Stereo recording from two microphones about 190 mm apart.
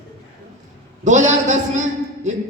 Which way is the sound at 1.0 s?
40° right (ahead or behind).